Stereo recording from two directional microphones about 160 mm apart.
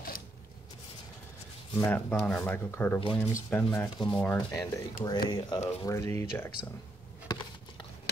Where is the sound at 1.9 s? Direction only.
15° left (ahead or behind).